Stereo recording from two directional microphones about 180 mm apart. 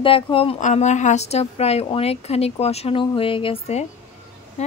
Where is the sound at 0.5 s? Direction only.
40° left (ahead or behind).